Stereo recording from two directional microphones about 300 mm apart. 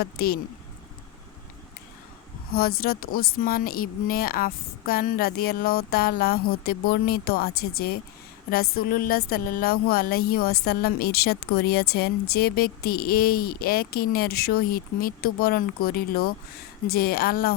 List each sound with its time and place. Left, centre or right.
0.0 s a woman's voice: left
2.5 s a woman's voice: left
8.7 s a woman's voice: left